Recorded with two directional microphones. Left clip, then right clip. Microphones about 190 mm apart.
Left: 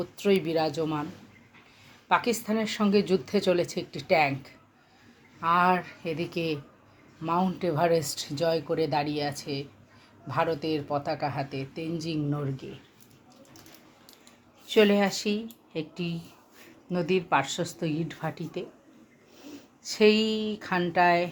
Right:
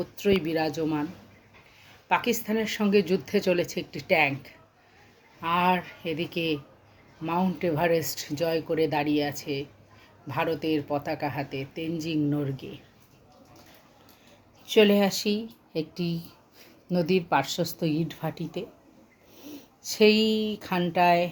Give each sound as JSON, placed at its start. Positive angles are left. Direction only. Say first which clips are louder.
{"t": 0.0, "sound": "a woman's voice", "louder": "even", "side_deg": -5}
{"t": 2.0, "sound": "a woman's voice", "louder": "even", "side_deg": 0}
{"t": 14.7, "sound": "speech", "louder": "right 1 dB", "side_deg": -15}